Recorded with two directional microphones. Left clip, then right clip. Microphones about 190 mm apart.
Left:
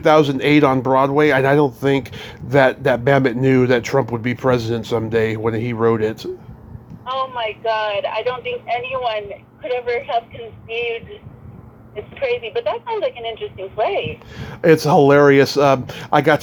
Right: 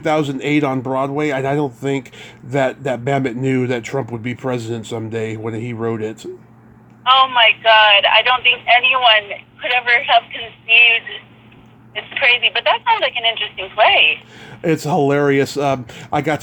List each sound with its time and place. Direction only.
0.0 s speech: centre (ahead or behind)
7.0 s speech: 55° right (ahead or behind)
14.3 s speech: centre (ahead or behind)